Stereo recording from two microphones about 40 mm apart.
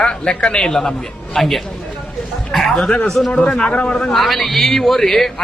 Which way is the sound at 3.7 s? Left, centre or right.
Left.